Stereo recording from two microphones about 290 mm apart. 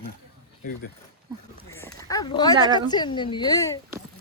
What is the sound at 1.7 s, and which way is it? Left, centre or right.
Speech, centre.